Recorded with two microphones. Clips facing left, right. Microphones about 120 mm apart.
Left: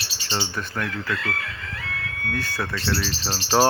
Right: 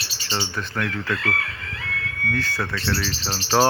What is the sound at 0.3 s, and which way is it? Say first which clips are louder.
Speech: even; 10° left (ahead or behind).